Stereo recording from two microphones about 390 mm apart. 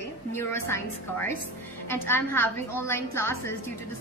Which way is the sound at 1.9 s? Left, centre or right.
Centre.